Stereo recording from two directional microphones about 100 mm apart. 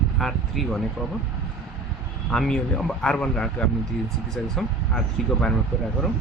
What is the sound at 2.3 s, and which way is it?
Speech, 5° left (ahead or behind).